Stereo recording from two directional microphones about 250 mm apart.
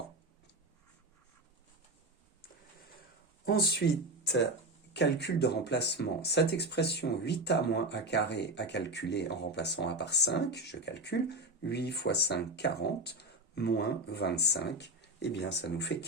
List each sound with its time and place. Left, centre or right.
3.4 s speech: left
4.9 s speech: left